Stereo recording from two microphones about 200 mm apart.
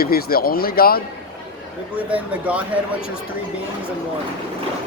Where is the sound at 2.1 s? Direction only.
5° right (ahead or behind).